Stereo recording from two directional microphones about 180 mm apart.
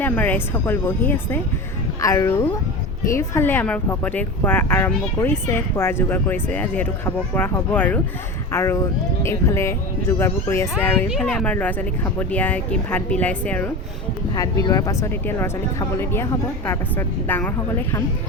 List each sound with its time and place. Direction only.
0.0 s speech: 10° left (ahead or behind)
11.1 s speech: centre (ahead or behind)
14.3 s speech: 20° left (ahead or behind)